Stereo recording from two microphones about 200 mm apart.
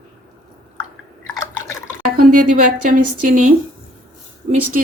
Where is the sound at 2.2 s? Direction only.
45° right (ahead or behind).